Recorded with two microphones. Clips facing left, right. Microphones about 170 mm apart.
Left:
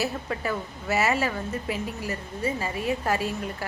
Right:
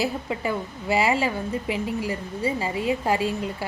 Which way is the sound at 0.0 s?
15° right (ahead or behind).